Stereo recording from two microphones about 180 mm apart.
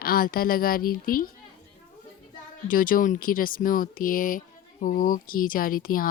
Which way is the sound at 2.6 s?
50° left (ahead or behind).